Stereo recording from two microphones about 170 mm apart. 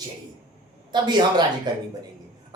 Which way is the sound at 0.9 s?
25° right (ahead or behind).